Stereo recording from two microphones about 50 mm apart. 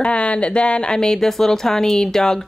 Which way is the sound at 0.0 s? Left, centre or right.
Left.